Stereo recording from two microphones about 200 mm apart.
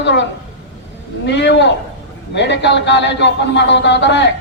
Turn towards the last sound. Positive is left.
turn(degrees=60)  # may be behind; listen again after turning